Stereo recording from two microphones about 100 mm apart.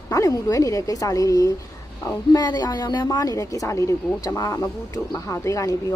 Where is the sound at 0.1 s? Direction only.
35° left (ahead or behind).